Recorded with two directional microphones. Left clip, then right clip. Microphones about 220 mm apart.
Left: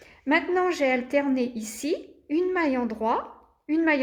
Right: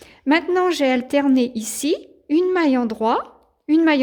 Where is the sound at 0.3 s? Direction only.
45° right (ahead or behind).